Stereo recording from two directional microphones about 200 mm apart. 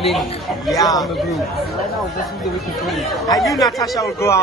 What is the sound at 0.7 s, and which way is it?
Speech, 20° left (ahead or behind).